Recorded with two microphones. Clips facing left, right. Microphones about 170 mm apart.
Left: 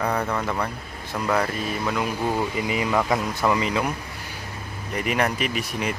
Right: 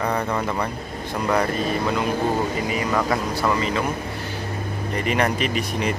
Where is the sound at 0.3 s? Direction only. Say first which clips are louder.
Right 2 dB; 10° right (ahead or behind).